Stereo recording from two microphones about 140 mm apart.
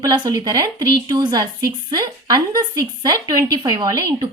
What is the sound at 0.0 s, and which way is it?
Speech, 30° right (ahead or behind).